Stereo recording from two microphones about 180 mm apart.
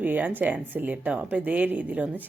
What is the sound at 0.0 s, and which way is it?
A woman's voice, 10° right (ahead or behind).